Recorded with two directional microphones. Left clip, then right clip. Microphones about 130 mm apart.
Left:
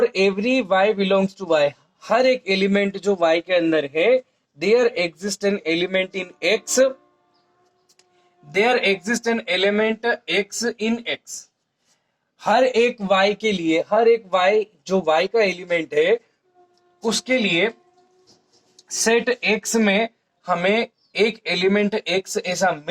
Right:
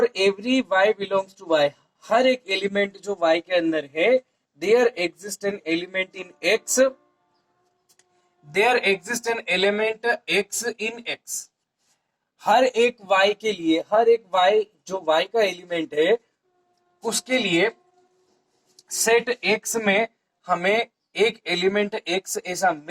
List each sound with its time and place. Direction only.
0.0 s a man's voice: 30° left (ahead or behind)
8.4 s speech: 25° left (ahead or behind)
8.8 s a man's voice: 40° left (ahead or behind)
9.2 s a man's voice: 30° left (ahead or behind); by 11.0 s 45° left (ahead or behind)
12.4 s a man's voice: 35° left (ahead or behind)
18.9 s a man's voice: 30° left (ahead or behind)